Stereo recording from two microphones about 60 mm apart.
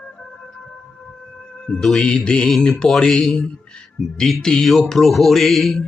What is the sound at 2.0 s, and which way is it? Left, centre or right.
Mantra, centre.